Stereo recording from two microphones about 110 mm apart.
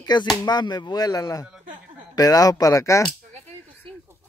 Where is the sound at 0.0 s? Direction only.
40° left (ahead or behind).